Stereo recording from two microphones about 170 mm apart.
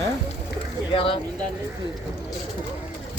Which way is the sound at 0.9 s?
30° left (ahead or behind).